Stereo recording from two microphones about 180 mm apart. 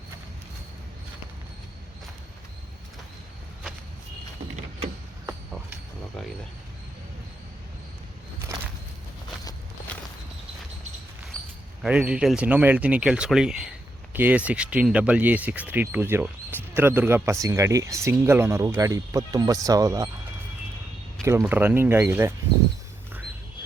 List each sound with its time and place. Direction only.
11.8 s speech: 5° right (ahead or behind)
21.4 s speech: 10° right (ahead or behind)